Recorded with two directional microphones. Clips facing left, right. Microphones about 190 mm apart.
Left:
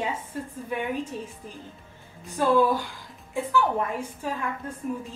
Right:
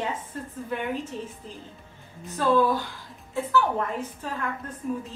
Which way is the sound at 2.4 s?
15° left (ahead or behind).